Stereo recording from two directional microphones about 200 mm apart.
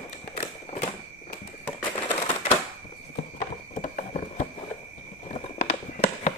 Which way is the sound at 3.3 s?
35° left (ahead or behind).